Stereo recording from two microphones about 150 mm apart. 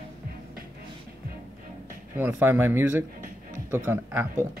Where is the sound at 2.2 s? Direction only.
15° right (ahead or behind).